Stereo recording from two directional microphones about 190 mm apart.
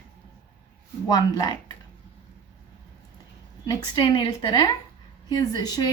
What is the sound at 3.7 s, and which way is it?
A woman's voice, 25° left (ahead or behind).